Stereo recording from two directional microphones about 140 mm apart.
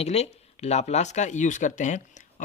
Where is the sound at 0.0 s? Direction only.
50° left (ahead or behind).